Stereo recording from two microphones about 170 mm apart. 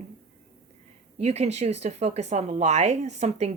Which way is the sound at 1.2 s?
40° right (ahead or behind).